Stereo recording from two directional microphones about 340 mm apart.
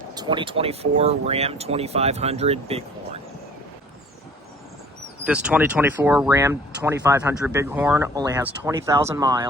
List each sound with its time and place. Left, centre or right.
0.1 s speech: centre
5.2 s speech: centre